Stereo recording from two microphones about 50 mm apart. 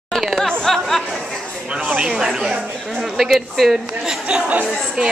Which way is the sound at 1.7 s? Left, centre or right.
Right.